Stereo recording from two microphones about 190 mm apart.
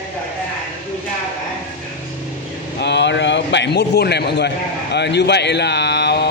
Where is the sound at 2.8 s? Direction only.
65° left (ahead or behind).